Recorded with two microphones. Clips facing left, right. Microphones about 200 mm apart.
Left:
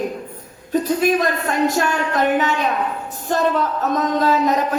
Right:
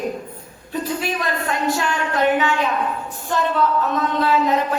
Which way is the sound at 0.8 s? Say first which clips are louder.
Left 6 dB; 45° left (ahead or behind).